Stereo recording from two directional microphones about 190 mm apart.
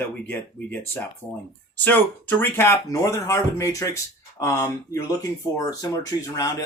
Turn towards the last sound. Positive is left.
turn(degrees=20)  # may be behind; listen again after turning